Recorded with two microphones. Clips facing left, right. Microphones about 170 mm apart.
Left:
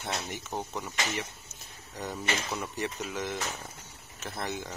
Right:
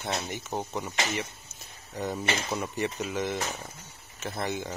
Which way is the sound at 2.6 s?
Centre (ahead or behind).